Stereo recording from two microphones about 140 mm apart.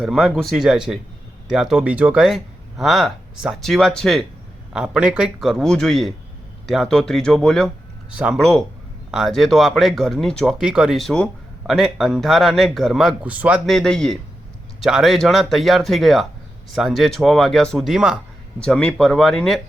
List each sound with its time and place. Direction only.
0.0 s speech: centre (ahead or behind)
8.1 s speech: 5° right (ahead or behind)
13.7 s speech: 5° left (ahead or behind)
18.6 s speech: 5° left (ahead or behind)